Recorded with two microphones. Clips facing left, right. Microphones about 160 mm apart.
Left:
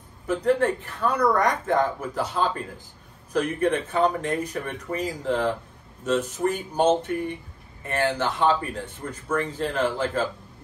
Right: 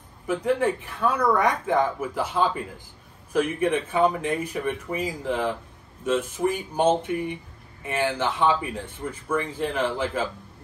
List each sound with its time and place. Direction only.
0.3 s speech: 10° right (ahead or behind)